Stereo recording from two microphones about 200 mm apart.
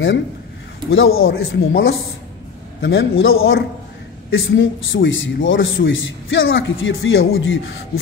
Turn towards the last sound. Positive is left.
turn(degrees=85)